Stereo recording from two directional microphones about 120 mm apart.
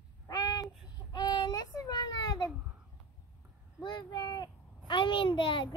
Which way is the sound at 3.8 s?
40° left (ahead or behind).